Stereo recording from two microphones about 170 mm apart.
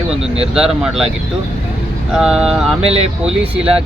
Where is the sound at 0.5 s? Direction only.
5° right (ahead or behind).